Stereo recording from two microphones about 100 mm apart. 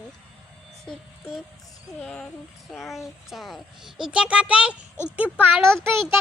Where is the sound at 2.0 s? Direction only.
5° left (ahead or behind); by 4.8 s 10° right (ahead or behind).